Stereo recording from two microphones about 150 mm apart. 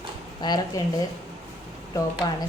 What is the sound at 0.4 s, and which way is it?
Speech, 30° left (ahead or behind).